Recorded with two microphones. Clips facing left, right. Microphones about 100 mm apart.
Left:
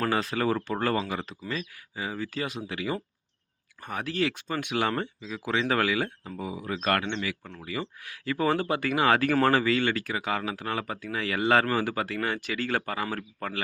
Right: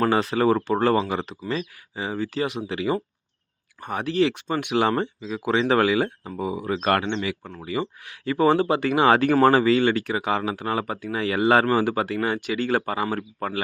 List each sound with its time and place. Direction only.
0.0 s speech: 30° right (ahead or behind)